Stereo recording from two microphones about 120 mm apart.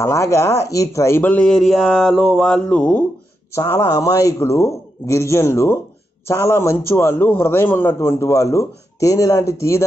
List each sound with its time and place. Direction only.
0.0 s speech: 25° left (ahead or behind)
3.5 s a man's voice: 20° left (ahead or behind)